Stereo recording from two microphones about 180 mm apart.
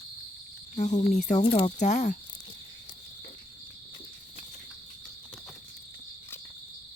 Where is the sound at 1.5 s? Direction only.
25° left (ahead or behind).